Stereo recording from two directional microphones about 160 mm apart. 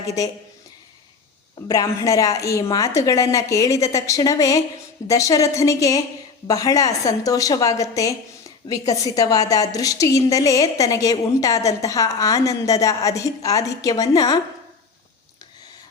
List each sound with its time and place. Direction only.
1.5 s a woman's voice: 25° left (ahead or behind)